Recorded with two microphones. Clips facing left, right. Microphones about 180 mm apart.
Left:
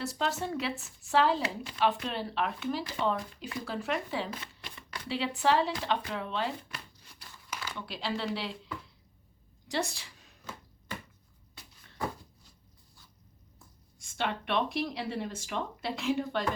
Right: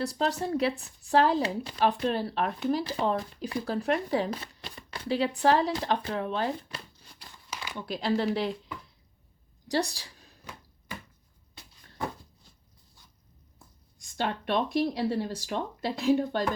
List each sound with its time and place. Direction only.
0.0 s speech: 35° right (ahead or behind)
5.0 s speech: 40° right (ahead or behind)
6.6 s speech: 30° right (ahead or behind)
7.8 s speech: 45° right (ahead or behind)
9.6 s a woman's voice: 35° right (ahead or behind)
14.0 s speech: 40° right (ahead or behind)